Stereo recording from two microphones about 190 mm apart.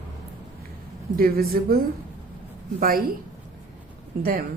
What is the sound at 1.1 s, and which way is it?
Speech, 50° right (ahead or behind).